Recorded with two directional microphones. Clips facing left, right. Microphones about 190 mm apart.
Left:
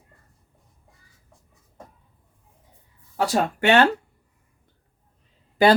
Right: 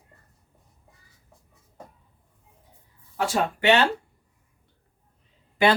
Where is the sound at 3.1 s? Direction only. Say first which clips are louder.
Left 3 dB; 40° left (ahead or behind).